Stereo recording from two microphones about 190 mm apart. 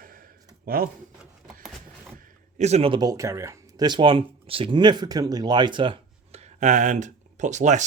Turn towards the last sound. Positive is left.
turn(degrees=-40)  # may be behind; listen again after turning